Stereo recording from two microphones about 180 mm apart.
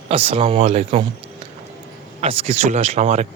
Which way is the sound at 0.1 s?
35° right (ahead or behind).